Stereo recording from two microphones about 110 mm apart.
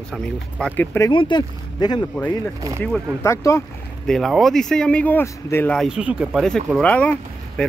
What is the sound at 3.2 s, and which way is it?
Speech, 25° left (ahead or behind).